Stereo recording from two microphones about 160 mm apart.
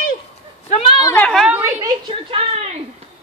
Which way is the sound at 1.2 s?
5° left (ahead or behind).